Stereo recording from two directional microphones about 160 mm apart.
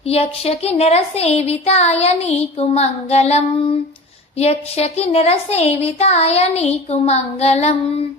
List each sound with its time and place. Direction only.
0.1 s speech: 40° left (ahead or behind)